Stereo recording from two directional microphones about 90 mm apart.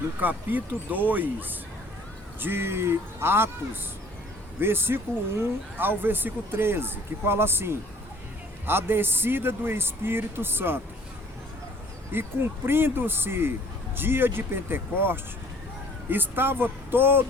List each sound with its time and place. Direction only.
0.2 s speech: 20° right (ahead or behind)
4.6 s speech: 25° right (ahead or behind)
12.1 s speech: 25° right (ahead or behind)